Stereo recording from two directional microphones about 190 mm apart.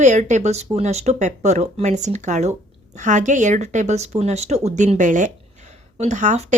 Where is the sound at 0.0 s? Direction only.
40° right (ahead or behind).